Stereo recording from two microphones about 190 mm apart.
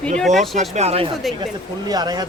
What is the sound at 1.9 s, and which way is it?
Speech, 20° right (ahead or behind).